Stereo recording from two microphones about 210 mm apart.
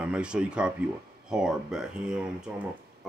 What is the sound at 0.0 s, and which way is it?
Mantra, 5° right (ahead or behind).